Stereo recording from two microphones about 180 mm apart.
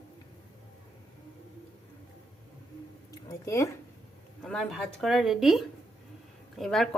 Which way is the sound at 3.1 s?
15° left (ahead or behind).